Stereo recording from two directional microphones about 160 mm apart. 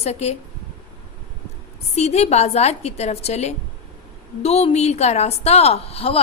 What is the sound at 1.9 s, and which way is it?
A woman's voice, 40° left (ahead or behind).